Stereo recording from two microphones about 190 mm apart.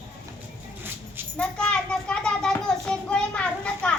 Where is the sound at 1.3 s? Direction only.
5° left (ahead or behind).